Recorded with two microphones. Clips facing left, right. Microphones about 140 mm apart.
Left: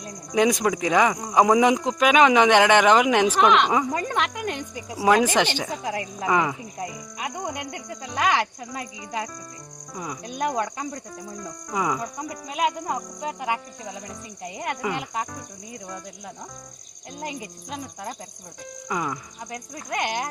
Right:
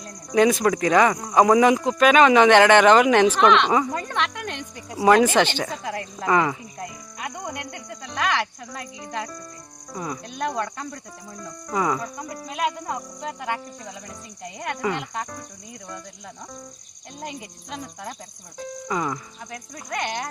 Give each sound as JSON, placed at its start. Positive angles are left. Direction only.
{"t": 0.0, "sound": "speech", "side_deg": 15}
{"t": 7.2, "sound": "speech", "side_deg": 20}
{"t": 10.0, "sound": "speech", "side_deg": 10}
{"t": 13.2, "sound": "speech", "side_deg": 10}
{"t": 17.2, "sound": "speech", "side_deg": 0}
{"t": 19.5, "sound": "speech", "side_deg": 15}